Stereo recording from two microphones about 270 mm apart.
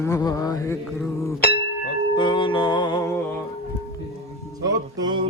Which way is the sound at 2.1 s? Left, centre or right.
Centre.